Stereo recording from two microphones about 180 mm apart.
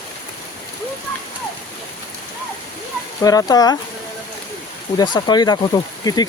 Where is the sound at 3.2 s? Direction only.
20° left (ahead or behind).